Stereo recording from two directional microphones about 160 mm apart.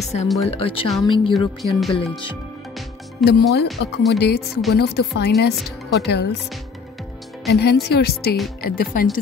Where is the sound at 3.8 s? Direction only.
90° left.